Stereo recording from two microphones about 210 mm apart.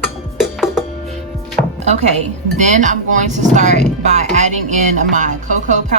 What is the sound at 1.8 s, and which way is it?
Music, 30° right (ahead or behind).